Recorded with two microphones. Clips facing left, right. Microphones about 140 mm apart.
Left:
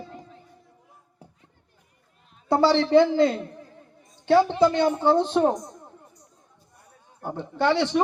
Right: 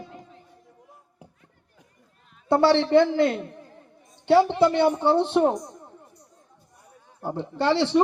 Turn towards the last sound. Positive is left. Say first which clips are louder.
# even
turn(degrees=-30)  # may be behind; listen again after turning